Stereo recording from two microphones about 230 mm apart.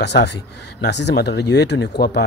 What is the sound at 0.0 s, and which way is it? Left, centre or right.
Speech, left.